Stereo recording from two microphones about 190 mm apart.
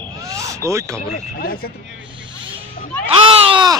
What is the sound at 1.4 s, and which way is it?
Speech, 50° left (ahead or behind).